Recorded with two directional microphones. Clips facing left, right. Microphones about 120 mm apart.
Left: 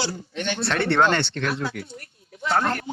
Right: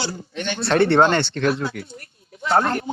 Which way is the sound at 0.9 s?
30° right (ahead or behind).